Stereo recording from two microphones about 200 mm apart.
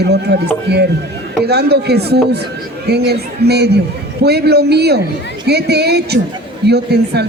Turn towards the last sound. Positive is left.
turn(degrees=-55)  # may be behind; listen again after turning